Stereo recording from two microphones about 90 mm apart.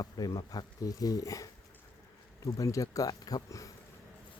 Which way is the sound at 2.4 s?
40° left (ahead or behind).